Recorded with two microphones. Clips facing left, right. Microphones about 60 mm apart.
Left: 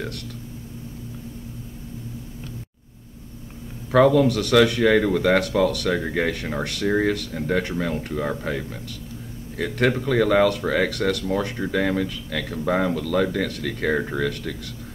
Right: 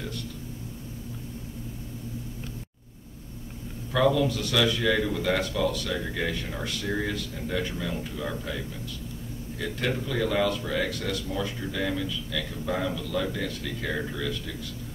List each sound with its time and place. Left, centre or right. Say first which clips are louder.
3.9 s speech: left 7 dB; left